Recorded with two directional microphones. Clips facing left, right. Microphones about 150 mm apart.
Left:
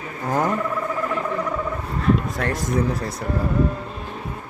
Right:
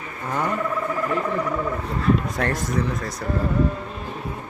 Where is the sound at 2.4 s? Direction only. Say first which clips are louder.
Right 1 dB; centre (ahead or behind).